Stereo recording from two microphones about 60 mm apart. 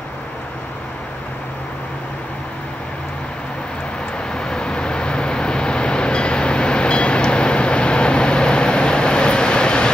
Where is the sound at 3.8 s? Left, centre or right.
Centre.